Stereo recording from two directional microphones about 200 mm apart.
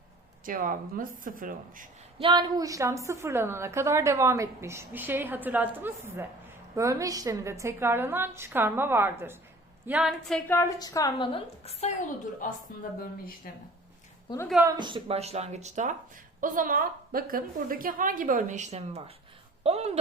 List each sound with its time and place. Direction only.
0.4 s speech: 45° right (ahead or behind)
2.2 s a woman's voice: 20° right (ahead or behind); by 11.9 s 30° left (ahead or behind)
12.4 s speech: 40° left (ahead or behind)
14.6 s a woman's voice: 20° right (ahead or behind)